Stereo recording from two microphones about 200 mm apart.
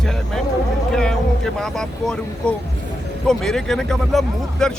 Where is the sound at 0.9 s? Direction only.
5° left (ahead or behind).